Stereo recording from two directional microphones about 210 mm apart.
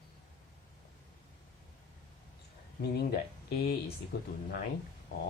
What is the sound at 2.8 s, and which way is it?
Speech, 50° left (ahead or behind).